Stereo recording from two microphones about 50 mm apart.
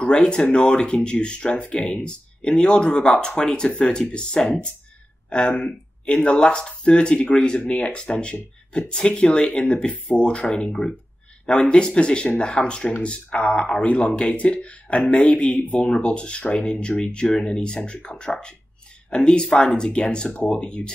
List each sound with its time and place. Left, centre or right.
0.0 s speech: centre